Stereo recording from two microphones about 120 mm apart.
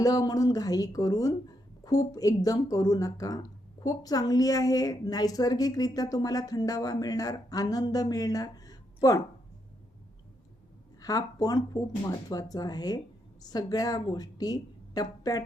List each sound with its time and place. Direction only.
0.0 s a woman's voice: 30° left (ahead or behind)
11.0 s a woman's voice: 30° left (ahead or behind)